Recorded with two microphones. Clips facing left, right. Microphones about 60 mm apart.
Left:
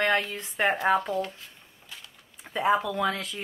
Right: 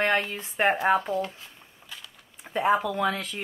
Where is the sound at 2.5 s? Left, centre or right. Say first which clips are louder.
Right 1 dB; centre.